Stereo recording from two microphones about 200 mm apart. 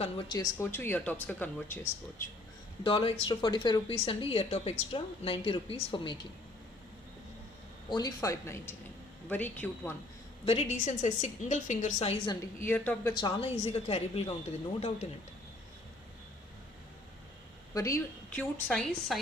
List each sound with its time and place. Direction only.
0.0 s speech: 25° left (ahead or behind)
2.8 s a woman's voice: 25° left (ahead or behind)
7.9 s speech: 20° left (ahead or behind)
10.4 s a woman's voice: 30° left (ahead or behind)
12.6 s speech: 10° left (ahead or behind)
13.1 s a woman's voice: 25° left (ahead or behind)
17.7 s speech: 15° left (ahead or behind)